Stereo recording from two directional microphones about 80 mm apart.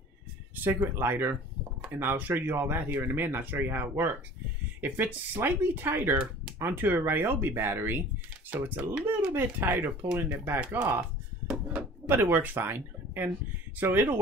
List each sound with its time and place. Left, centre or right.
0.7 s speech: right
10.7 s a sound: right
11.7 s speech: right